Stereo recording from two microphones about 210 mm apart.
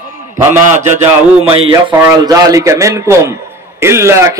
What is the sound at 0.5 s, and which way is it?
Speech, 35° right (ahead or behind).